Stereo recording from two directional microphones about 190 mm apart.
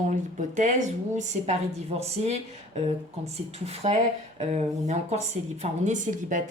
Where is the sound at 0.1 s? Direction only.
40° right (ahead or behind).